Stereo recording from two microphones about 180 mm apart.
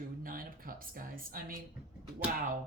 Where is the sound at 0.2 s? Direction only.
50° right (ahead or behind).